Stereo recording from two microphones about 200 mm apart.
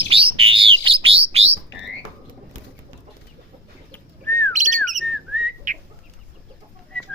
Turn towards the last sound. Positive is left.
turn(degrees=5)  # may be behind; listen again after turning